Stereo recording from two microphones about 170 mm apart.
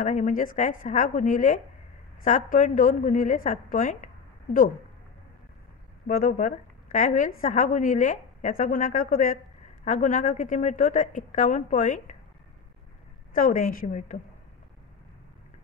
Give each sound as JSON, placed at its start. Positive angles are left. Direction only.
{"t": 0.0, "sound": "a woman's voice", "side_deg": 45}
{"t": 6.0, "sound": "a woman's voice", "side_deg": 55}
{"t": 13.3, "sound": "a woman's voice", "side_deg": 50}